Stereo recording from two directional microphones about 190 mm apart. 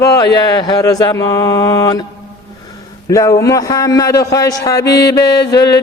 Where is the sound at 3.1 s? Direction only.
20° left (ahead or behind).